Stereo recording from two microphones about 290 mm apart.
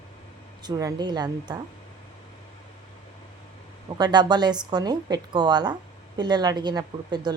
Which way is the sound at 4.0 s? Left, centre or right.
Centre.